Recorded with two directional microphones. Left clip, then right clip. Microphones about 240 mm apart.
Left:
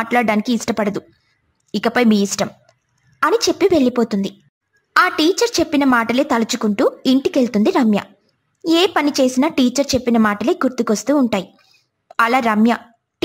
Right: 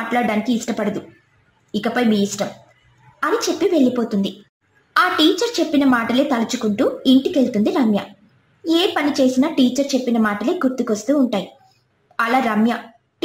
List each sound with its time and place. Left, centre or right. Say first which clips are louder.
0.1 s a woman's voice: left 2 dB; left